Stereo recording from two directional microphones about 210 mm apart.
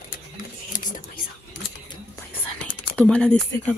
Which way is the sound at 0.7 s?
40° left (ahead or behind).